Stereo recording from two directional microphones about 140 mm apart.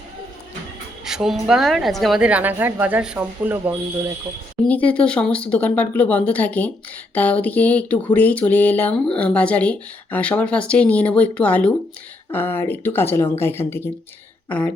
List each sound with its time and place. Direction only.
1.0 s a woman's voice: 5° right (ahead or behind)
4.6 s speech: 10° left (ahead or behind)